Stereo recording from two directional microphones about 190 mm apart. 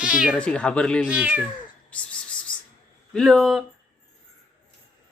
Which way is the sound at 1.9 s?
5° left (ahead or behind).